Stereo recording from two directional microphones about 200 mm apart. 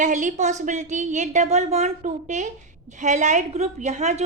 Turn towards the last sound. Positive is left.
turn(degrees=-35)  # may be behind; listen again after turning